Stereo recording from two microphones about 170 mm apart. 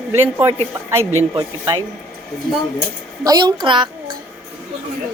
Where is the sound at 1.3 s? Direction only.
20° right (ahead or behind).